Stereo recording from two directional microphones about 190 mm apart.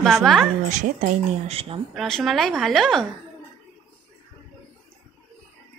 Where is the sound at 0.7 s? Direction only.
40° right (ahead or behind).